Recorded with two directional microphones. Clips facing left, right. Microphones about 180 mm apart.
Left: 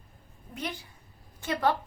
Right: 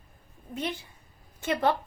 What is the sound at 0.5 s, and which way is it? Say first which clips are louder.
A woman's voice: right 4 dB; 25° right (ahead or behind).